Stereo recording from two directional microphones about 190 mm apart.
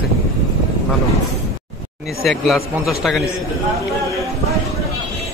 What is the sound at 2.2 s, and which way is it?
Speech, centre (ahead or behind).